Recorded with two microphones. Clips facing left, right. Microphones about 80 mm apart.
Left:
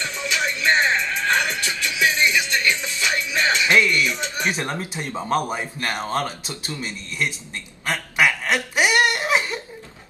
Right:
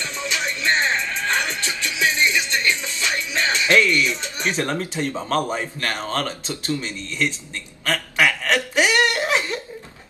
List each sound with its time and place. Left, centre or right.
0.1 s music: right
0.7 s music: left
0.9 s music: right
3.6 s speech: centre
7.8 s a sound: centre